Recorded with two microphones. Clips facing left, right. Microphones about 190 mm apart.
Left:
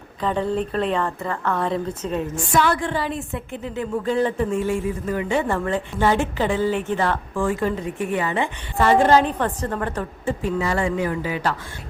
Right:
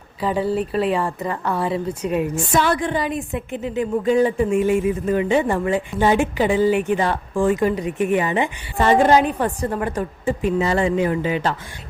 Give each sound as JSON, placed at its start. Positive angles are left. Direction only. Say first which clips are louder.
{"t": 0.2, "sound": "a woman's voice", "louder": "right 2 dB", "side_deg": -10}